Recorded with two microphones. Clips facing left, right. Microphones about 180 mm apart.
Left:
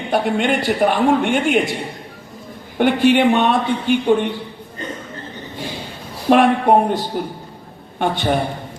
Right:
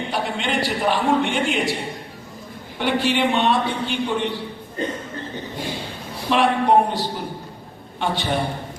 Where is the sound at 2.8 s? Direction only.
50° left (ahead or behind).